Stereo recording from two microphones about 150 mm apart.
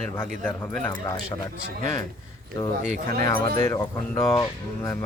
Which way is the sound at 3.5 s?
15° left (ahead or behind).